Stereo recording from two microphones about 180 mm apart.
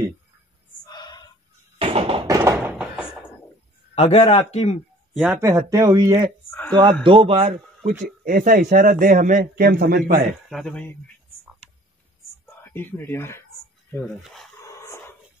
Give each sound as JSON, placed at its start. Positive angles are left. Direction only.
{"t": 0.8, "sound": "a sound", "side_deg": 25}
{"t": 1.8, "sound": "a sound", "side_deg": -30}
{"t": 2.2, "sound": "tap", "side_deg": -20}
{"t": 3.9, "sound": "a man's voice", "side_deg": 35}
{"t": 5.2, "sound": "speech", "side_deg": -15}
{"t": 7.8, "sound": "speech", "side_deg": -45}
{"t": 10.5, "sound": "speech", "side_deg": 5}
{"t": 12.7, "sound": "speech", "side_deg": 10}
{"t": 14.0, "sound": "speech", "side_deg": 0}
{"t": 14.6, "sound": "dog", "side_deg": 15}